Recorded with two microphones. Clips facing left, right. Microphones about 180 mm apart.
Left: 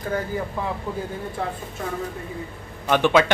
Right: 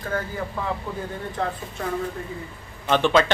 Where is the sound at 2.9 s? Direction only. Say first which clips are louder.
Left 1 dB; 10° left (ahead or behind).